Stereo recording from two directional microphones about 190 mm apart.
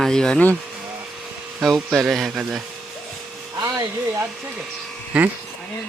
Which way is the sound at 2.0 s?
Centre (ahead or behind).